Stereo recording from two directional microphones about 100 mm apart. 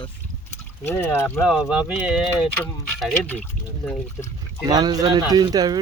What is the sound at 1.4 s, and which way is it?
Speech, centre (ahead or behind).